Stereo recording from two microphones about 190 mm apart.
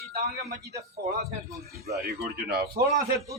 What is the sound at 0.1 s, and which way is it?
Speech, 55° right (ahead or behind).